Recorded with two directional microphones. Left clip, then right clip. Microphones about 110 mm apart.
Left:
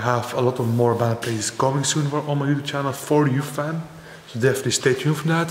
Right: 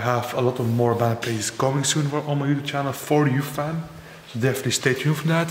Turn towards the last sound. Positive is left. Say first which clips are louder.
# left 1 dB
turn(degrees=10)  # may be behind; listen again after turning